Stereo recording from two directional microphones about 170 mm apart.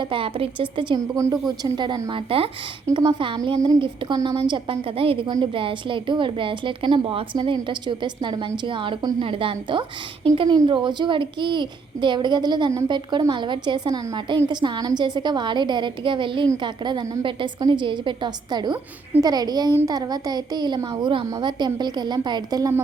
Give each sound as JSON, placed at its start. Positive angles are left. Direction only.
{"t": 0.0, "sound": "a child's voice", "side_deg": -30}